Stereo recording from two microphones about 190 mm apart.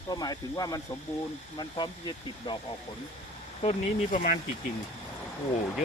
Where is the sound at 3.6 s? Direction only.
40° left (ahead or behind).